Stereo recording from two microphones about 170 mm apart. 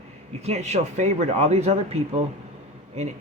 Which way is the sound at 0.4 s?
40° right (ahead or behind).